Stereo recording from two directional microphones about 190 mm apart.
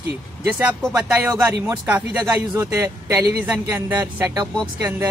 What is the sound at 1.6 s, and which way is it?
Speech, 10° right (ahead or behind).